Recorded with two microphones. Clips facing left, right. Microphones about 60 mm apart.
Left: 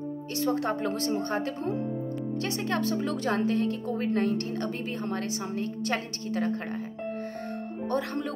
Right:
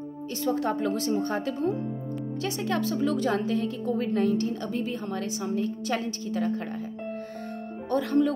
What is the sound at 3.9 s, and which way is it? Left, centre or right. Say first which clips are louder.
A woman's voice: right 3 dB; left.